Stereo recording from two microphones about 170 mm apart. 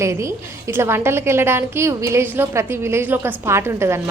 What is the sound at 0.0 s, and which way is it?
A woman's voice, 15° right (ahead or behind).